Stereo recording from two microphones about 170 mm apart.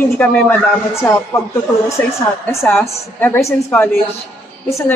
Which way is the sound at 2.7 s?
10° left (ahead or behind).